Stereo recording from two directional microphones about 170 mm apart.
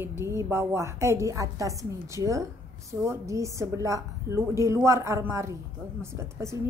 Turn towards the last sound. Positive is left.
turn(degrees=-15)  # may be behind; listen again after turning